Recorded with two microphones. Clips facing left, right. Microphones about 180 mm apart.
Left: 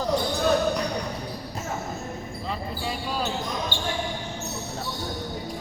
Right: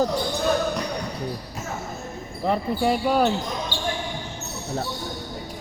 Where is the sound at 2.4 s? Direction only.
60° right (ahead or behind).